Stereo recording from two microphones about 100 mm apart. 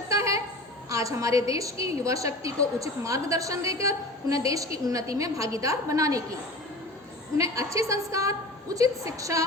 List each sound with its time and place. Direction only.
0.1 s a sound: 30° right (ahead or behind)
0.9 s a woman's voice: 35° right (ahead or behind)
7.3 s a woman's voice: 30° right (ahead or behind)